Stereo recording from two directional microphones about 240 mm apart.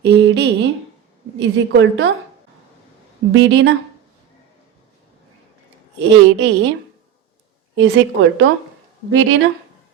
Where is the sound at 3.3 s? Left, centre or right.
Right.